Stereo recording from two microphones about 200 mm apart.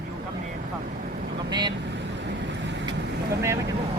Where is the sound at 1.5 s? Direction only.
20° right (ahead or behind).